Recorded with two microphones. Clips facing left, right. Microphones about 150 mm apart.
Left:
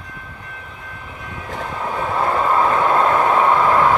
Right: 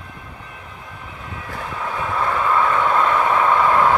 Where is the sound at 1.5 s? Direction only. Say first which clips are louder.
Left 3 dB; 25° left (ahead or behind).